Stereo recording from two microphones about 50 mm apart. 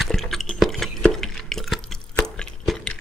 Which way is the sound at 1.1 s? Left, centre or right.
Centre.